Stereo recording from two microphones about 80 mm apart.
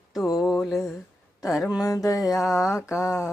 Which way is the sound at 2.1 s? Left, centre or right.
Left.